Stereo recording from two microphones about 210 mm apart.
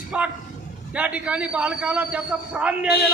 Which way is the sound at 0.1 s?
5° right (ahead or behind).